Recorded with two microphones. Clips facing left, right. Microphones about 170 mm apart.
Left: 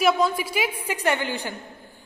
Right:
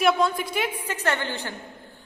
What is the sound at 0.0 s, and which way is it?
A woman's voice, centre (ahead or behind).